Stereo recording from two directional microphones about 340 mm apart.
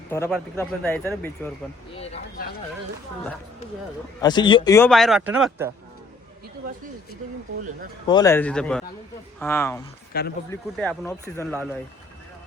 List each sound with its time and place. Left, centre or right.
0.1 s speech: centre
2.0 s speech: left
4.2 s a man's voice: centre
8.0 s a man's voice: centre
10.1 s speech: left
10.5 s speech: centre